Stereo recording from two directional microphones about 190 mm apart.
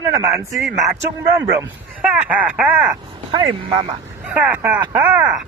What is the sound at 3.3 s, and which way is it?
Speech, 25° right (ahead or behind).